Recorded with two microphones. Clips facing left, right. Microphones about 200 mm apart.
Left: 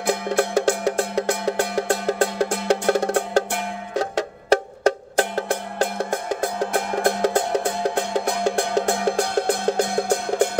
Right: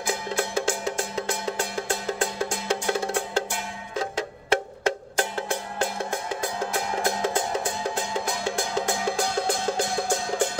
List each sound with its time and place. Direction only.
0.0 s music: 60° left (ahead or behind)
3.0 s percussion: 60° left (ahead or behind)
4.5 s music: 40° left (ahead or behind)
6.4 s music: 60° left (ahead or behind)